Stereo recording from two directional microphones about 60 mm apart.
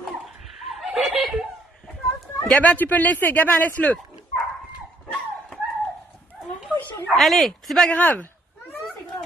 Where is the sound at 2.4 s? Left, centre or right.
Left.